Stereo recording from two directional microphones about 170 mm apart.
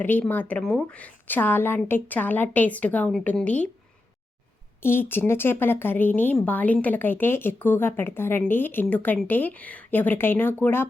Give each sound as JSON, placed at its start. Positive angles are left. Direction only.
{"t": 0.0, "sound": "a woman's voice", "side_deg": 10}
{"t": 4.8, "sound": "a woman's voice", "side_deg": 15}